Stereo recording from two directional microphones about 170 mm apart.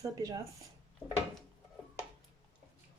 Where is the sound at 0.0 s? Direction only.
20° right (ahead or behind).